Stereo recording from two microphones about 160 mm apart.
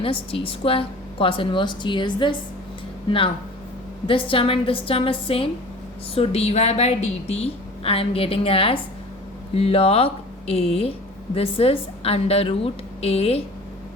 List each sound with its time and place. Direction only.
0.0 s a woman's voice: 35° left (ahead or behind)